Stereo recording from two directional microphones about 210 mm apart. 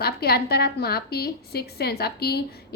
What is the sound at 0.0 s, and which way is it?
A woman's voice, 50° left (ahead or behind).